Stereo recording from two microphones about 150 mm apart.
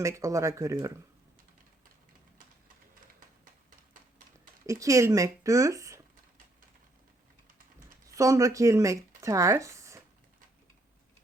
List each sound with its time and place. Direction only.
0.0 s speech: 20° right (ahead or behind)
4.6 s speech: 20° right (ahead or behind)
8.1 s speech: 20° right (ahead or behind)